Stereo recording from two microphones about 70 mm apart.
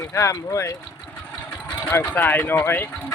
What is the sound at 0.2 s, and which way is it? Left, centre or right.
Speech, left.